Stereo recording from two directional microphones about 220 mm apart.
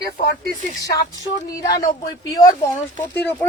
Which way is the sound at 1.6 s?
15° left (ahead or behind).